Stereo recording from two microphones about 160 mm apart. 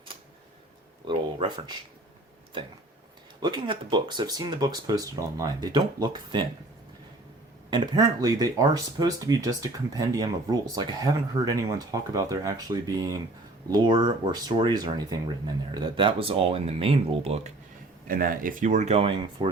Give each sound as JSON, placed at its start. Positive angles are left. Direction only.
{"t": 1.0, "sound": "a sound", "side_deg": -30}
{"t": 3.4, "sound": "speech", "side_deg": -30}
{"t": 7.7, "sound": "speech", "side_deg": -25}
{"t": 18.1, "sound": "speech", "side_deg": -60}